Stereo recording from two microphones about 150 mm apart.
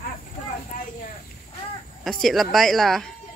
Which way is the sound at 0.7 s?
70° left (ahead or behind).